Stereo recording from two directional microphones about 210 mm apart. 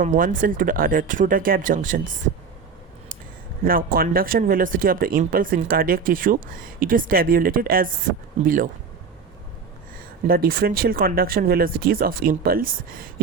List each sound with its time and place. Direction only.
0.0 s speech: 40° right (ahead or behind)
3.6 s speech: 45° right (ahead or behind)
10.2 s speech: 45° right (ahead or behind)